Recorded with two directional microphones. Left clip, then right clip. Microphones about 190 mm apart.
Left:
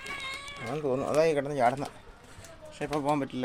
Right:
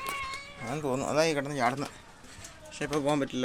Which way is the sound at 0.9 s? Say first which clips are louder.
Left 2 dB; 5° left (ahead or behind).